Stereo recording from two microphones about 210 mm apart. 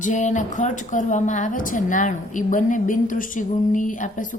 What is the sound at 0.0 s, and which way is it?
A woman's voice, 35° left (ahead or behind).